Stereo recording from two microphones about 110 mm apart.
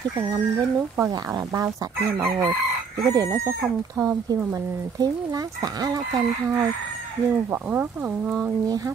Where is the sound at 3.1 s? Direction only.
30° right (ahead or behind).